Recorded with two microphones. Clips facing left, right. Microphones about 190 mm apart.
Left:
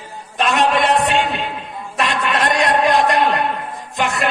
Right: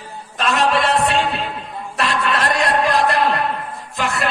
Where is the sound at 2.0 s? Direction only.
Centre (ahead or behind).